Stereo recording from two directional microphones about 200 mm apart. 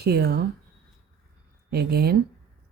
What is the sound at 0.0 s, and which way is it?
Speech, 55° right (ahead or behind).